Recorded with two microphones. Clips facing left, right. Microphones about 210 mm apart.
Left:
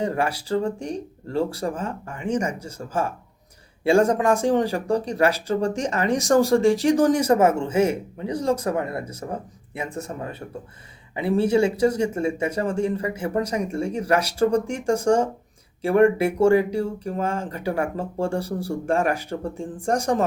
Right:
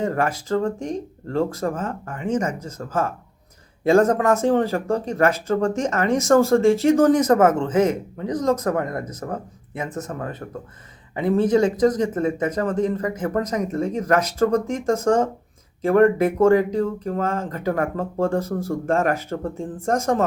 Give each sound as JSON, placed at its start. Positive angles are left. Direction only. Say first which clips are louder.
{"t": 0.0, "sound": "speech", "louder": "right 2 dB", "side_deg": 15}
{"t": 5.3, "sound": "speech", "louder": "right 2 dB", "side_deg": 35}
{"t": 6.0, "sound": "speech", "louder": "right 2 dB", "side_deg": 15}
{"t": 8.4, "sound": "speech", "louder": "right 2 dB", "side_deg": 30}
{"t": 9.3, "sound": "speech", "louder": "right 1 dB", "side_deg": 10}
{"t": 11.1, "sound": "speech", "louder": "right 2 dB", "side_deg": 10}